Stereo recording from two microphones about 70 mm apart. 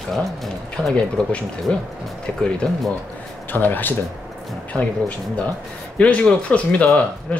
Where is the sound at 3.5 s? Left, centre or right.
Left.